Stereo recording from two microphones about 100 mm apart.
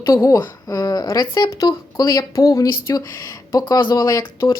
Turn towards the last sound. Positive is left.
turn(degrees=35)  # may be behind; listen again after turning